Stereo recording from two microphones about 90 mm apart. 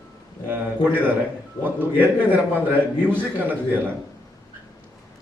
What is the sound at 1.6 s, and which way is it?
A man's voice, 20° right (ahead or behind).